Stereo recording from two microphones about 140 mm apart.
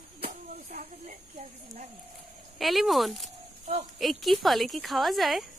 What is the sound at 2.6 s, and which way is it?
A woman's voice, centre (ahead or behind).